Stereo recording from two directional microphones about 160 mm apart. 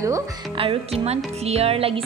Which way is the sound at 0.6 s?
35° right (ahead or behind).